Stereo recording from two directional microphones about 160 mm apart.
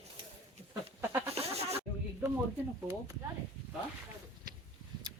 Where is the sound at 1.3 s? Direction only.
40° right (ahead or behind).